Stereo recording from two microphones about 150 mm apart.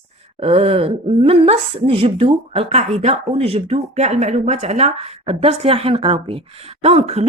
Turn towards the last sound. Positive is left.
turn(degrees=-45)  # may be behind; listen again after turning